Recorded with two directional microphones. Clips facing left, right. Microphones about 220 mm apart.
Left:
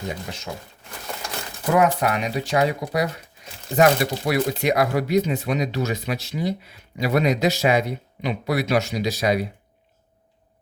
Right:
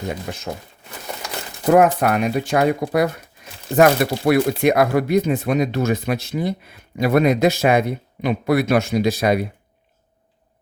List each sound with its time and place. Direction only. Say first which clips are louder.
1.7 s speech: right 5 dB; 55° right (ahead or behind)